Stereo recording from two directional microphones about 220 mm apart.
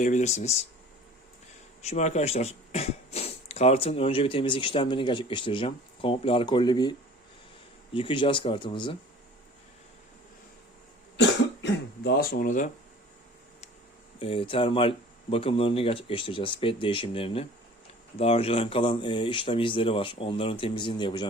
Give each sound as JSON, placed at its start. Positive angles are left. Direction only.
{"t": 0.0, "sound": "speech", "side_deg": 30}
{"t": 1.8, "sound": "speech", "side_deg": 30}
{"t": 7.9, "sound": "speech", "side_deg": 20}
{"t": 11.2, "sound": "cough", "side_deg": 50}
{"t": 14.2, "sound": "speech", "side_deg": 25}